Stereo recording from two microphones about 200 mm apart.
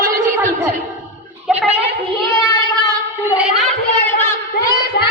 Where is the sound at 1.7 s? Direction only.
25° right (ahead or behind).